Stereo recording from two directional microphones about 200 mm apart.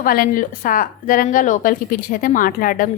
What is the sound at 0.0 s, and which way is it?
A woman's voice, 45° left (ahead or behind).